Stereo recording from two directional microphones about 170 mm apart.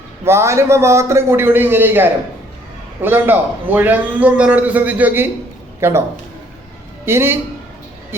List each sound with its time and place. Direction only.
0.3 s a man's voice: 15° right (ahead or behind)
7.0 s a woman's voice: 15° right (ahead or behind)